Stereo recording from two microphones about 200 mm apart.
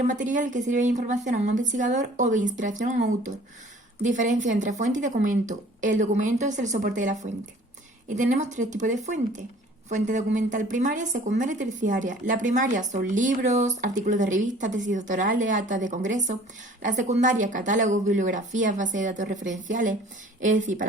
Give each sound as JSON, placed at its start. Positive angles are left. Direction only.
{"t": 0.1, "sound": "speech", "side_deg": -40}
{"t": 4.0, "sound": "speech", "side_deg": -40}